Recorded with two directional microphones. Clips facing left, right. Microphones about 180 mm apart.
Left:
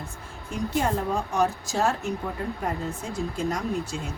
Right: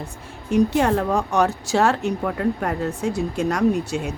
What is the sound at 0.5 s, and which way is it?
Speech, 70° right (ahead or behind).